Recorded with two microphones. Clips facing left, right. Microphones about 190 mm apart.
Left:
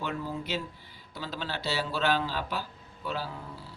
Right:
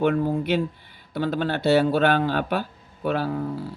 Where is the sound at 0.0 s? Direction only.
55° right (ahead or behind).